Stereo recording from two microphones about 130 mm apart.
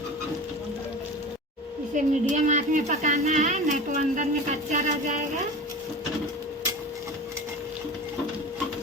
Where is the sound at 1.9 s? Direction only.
70° right (ahead or behind).